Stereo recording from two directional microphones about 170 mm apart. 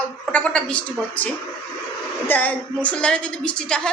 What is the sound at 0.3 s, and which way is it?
A woman's voice, 5° left (ahead or behind).